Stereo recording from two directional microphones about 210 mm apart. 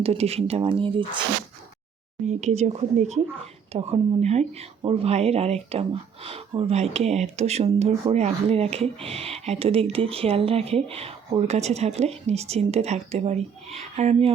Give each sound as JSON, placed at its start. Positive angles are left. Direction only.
{"t": 0.0, "sound": "speech", "side_deg": -30}
{"t": 2.2, "sound": "speech", "side_deg": -30}